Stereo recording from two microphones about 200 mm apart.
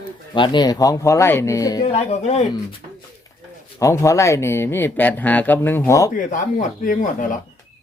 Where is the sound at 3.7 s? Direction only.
15° left (ahead or behind).